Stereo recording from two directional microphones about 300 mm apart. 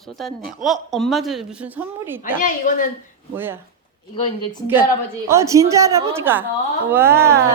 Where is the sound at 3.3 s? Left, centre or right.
Centre.